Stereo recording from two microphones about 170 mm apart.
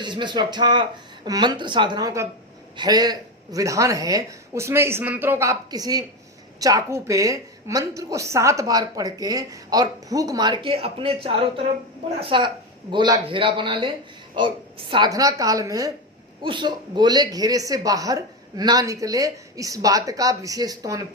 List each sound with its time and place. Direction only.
0.0 s a woman's voice: 25° right (ahead or behind)